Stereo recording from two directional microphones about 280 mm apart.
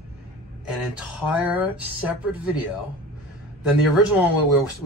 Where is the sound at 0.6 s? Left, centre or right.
Centre.